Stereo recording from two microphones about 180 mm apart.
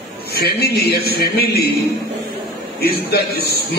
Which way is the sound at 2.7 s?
60° left (ahead or behind).